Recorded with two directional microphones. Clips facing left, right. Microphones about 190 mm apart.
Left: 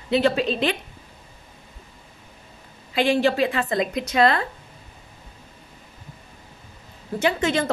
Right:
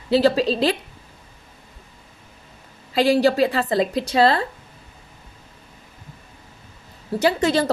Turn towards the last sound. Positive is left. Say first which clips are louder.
# right 3 dB
turn(degrees=-35)  # may be behind; listen again after turning